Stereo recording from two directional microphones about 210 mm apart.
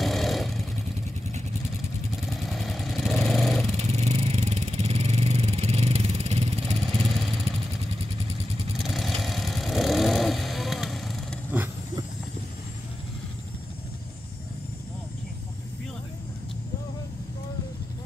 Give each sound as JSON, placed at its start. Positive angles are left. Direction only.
{"t": 0.0, "sound": "vehicle", "side_deg": 0}
{"t": 2.4, "sound": "vehicle", "side_deg": 0}
{"t": 3.7, "sound": "vehicle", "side_deg": -30}
{"t": 8.8, "sound": "vehicle", "side_deg": 0}